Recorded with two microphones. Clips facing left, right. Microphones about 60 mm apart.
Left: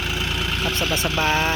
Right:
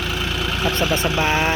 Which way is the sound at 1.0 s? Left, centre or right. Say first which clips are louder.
Left 1 dB; centre.